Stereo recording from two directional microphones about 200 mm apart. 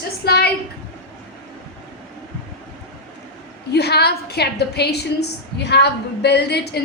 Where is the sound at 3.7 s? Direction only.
55° left (ahead or behind).